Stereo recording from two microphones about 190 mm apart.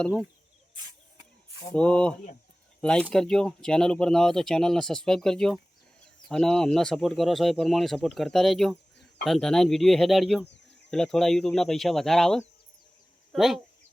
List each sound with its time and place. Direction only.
1.7 s speech: 5° left (ahead or behind)
10.5 s cricket: 65° left (ahead or behind)
10.9 s speech: 5° left (ahead or behind)